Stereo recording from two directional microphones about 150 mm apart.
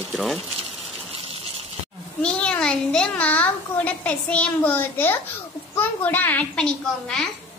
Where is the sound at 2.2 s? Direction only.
5° left (ahead or behind).